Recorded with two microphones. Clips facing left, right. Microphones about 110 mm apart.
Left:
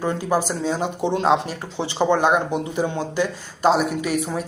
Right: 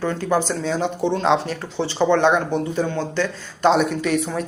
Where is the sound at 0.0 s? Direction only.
10° left (ahead or behind).